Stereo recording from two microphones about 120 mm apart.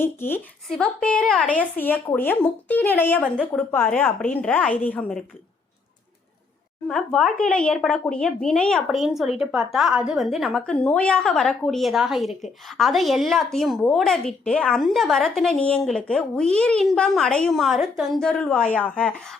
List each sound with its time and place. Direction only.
0.0 s a woman's voice: 20° left (ahead or behind)
0.7 s a woman's voice: 5° left (ahead or behind)
6.8 s a woman's voice: 5° left (ahead or behind)